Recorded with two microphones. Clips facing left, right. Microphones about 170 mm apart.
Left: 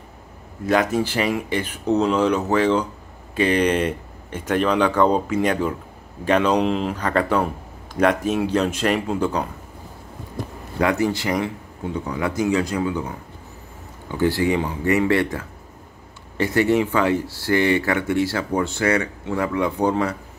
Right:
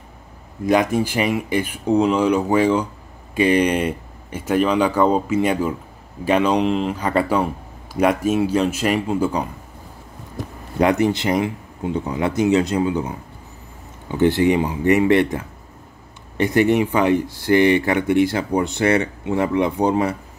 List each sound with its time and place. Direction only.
0.7 s speech: 15° right (ahead or behind)
10.8 s speech: 20° right (ahead or behind)
14.1 s speech: 20° right (ahead or behind)